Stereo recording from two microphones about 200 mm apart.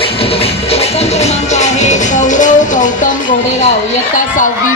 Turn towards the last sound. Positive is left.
turn(degrees=40)  # may be behind; listen again after turning